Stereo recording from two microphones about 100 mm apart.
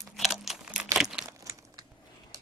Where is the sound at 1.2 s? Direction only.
35° right (ahead or behind).